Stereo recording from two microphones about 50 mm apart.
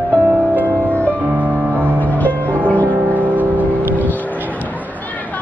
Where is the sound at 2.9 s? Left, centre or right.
Right.